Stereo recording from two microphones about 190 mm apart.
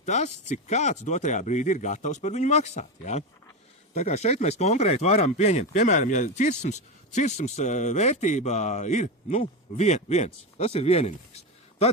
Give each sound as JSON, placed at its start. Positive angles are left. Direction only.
{"t": 0.0, "sound": "speech", "side_deg": 40}